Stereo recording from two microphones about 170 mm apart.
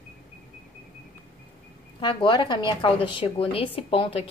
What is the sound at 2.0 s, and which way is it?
A woman's voice, 30° left (ahead or behind).